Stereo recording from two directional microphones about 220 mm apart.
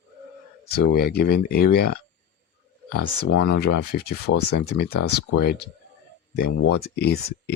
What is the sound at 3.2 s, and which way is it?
Speech, 50° left (ahead or behind).